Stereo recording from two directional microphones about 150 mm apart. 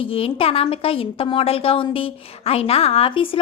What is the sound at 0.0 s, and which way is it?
A woman's voice, 40° left (ahead or behind).